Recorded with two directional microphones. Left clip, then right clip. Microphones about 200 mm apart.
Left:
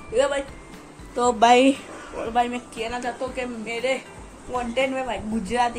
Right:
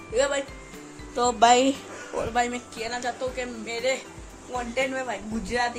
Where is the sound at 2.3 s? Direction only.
20° right (ahead or behind).